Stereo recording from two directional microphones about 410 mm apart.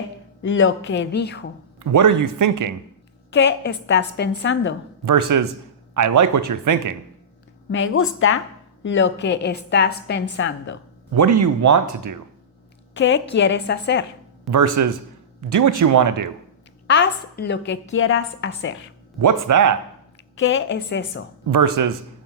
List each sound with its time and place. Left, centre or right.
0.4 s a woman's voice: left
1.8 s speech: right
3.3 s a woman's voice: left
5.0 s speech: right
7.7 s a woman's voice: left
11.1 s speech: right
12.9 s a woman's voice: left
14.5 s speech: right
16.8 s a woman's voice: left
19.2 s speech: right
20.3 s a woman's voice: left
21.5 s speech: right